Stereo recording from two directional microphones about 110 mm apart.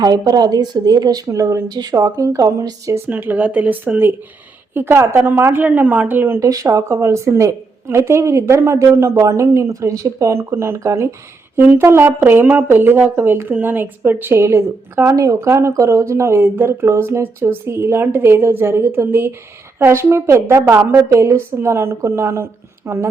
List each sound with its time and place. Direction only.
0.0 s a woman's voice: 35° right (ahead or behind)
3.1 s speech: 15° right (ahead or behind)